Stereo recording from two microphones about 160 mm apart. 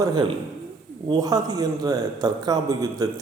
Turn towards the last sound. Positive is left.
turn(degrees=-20)  # may be behind; listen again after turning